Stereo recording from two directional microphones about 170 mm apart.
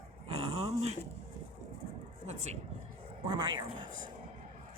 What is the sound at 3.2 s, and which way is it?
Speech, 25° right (ahead or behind).